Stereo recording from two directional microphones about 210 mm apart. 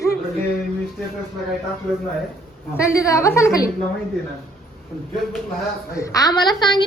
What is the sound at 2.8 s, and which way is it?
Speech, 15° left (ahead or behind).